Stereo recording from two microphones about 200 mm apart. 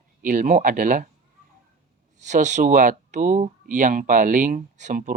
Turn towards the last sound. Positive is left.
turn(degrees=-45)  # may be behind; listen again after turning